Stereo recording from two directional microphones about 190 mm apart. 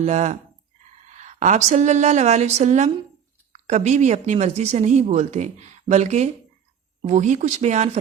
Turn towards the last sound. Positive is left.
turn(degrees=-40)  # may be behind; listen again after turning